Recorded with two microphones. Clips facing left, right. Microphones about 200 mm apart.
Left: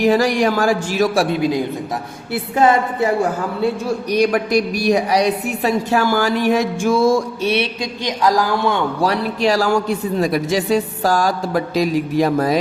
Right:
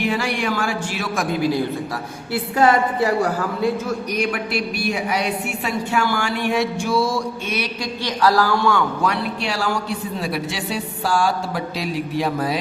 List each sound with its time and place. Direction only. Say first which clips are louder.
0.0 s a woman's voice: left 8 dB; 40° left (ahead or behind); by 3.2 s 25° left (ahead or behind)
3.8 s a woman's voice: left 6 dB; 35° left (ahead or behind)
8.0 s a man's voice: left 1 dB; 15° left (ahead or behind)
9.0 s a man's voice: left 4 dB; 35° left (ahead or behind)